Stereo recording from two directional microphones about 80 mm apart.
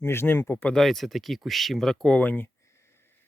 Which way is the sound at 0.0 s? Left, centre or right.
Left.